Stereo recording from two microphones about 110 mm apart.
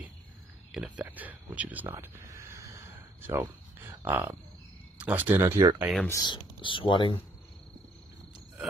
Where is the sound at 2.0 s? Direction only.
25° right (ahead or behind).